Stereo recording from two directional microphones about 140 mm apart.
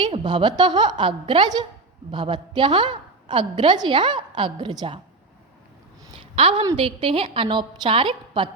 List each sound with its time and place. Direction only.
0.0 s a woman's voice: 35° right (ahead or behind)
6.3 s a woman's voice: 40° right (ahead or behind)